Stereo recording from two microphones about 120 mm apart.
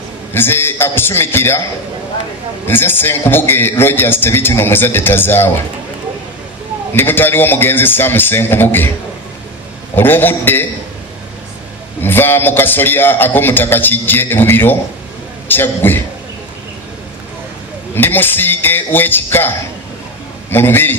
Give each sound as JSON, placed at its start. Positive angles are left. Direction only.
{"t": 0.3, "sound": "a man's voice", "side_deg": 20}
{"t": 2.6, "sound": "a man's voice", "side_deg": 20}
{"t": 6.9, "sound": "a man's voice", "side_deg": 15}
{"t": 9.9, "sound": "a man's voice", "side_deg": 15}
{"t": 12.0, "sound": "a man's voice", "side_deg": 15}
{"t": 17.9, "sound": "a man's voice", "side_deg": 15}